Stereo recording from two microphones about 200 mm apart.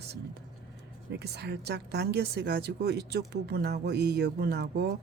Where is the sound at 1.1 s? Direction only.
55° right (ahead or behind).